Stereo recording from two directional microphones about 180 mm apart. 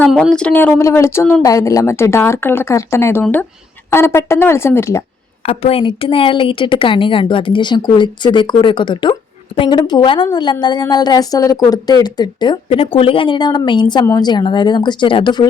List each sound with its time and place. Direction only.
0.0 s speech: 5° left (ahead or behind)
5.5 s a woman's voice: 30° left (ahead or behind)